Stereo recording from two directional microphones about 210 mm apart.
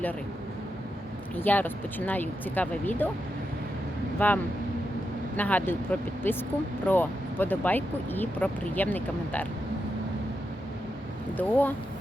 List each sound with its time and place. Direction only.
1.4 s speech: 10° left (ahead or behind)
4.2 s speech: 10° left (ahead or behind)
5.4 s speech: 10° left (ahead or behind)
11.3 s speech: 10° left (ahead or behind)